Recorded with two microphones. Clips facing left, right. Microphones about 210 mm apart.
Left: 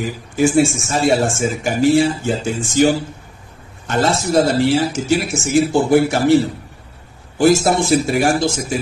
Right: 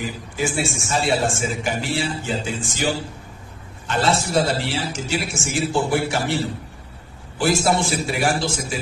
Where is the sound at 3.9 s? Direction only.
45° left (ahead or behind).